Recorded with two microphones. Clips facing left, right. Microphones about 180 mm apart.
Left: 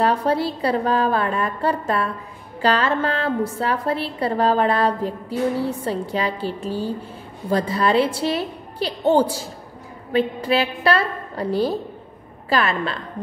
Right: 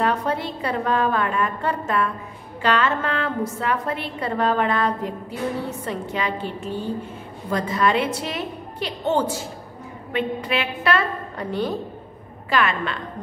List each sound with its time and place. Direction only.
0.0 s a woman's voice: 35° left (ahead or behind)